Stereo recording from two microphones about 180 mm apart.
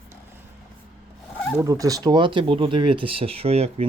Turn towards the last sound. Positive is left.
turn(degrees=-35)  # may be behind; listen again after turning